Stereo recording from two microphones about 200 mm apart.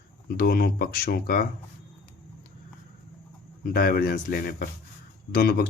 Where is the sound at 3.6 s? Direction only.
45° left (ahead or behind).